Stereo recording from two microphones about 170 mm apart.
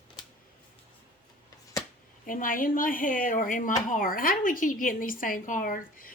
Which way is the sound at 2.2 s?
55° left (ahead or behind).